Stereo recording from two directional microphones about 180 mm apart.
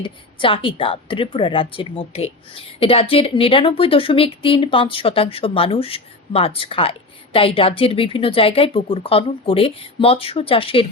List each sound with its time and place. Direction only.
0.0 s a woman's voice: 30° left (ahead or behind)